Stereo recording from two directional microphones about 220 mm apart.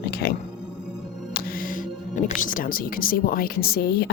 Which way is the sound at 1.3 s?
40° left (ahead or behind).